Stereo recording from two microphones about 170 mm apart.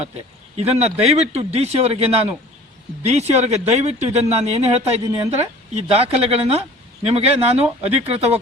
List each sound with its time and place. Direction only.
0.5 s speech: 40° right (ahead or behind)